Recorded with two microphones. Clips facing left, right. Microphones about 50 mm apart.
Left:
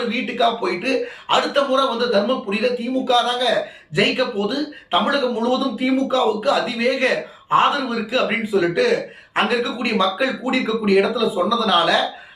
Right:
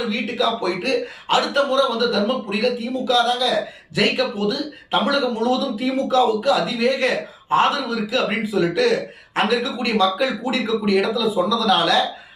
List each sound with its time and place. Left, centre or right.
0.1 s speech: left
3.1 s a man's voice: left